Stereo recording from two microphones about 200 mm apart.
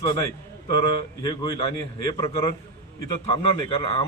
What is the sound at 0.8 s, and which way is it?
Speech, 20° left (ahead or behind).